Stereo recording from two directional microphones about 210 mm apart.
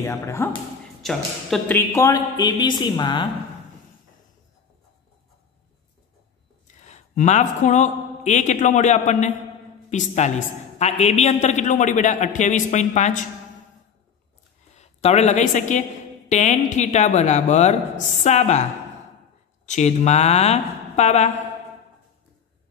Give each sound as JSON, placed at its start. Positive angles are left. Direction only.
{"t": 0.0, "sound": "speech", "side_deg": 10}
{"t": 1.0, "sound": "speech", "side_deg": 0}
{"t": 1.8, "sound": "a woman's voice", "side_deg": 15}
{"t": 6.8, "sound": "a man's voice", "side_deg": 35}
{"t": 14.7, "sound": "a man's voice", "side_deg": 30}